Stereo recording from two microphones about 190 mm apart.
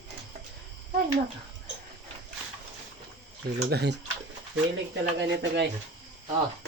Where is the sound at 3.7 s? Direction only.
60° right (ahead or behind).